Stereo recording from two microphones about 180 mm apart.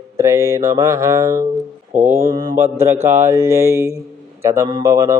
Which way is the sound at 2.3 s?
20° right (ahead or behind).